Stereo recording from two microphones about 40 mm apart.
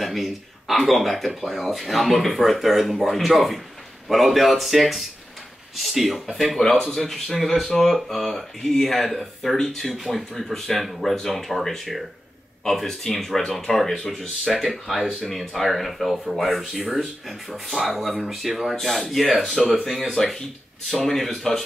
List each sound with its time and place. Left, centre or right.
0.0 s speech: centre
6.6 s speech: centre
9.9 s speech: centre
10.3 s speech: centre
19.5 s speech: centre
19.9 s speech: centre
20.2 s speech: centre